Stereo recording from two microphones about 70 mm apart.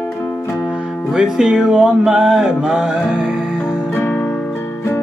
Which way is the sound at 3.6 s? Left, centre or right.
Left.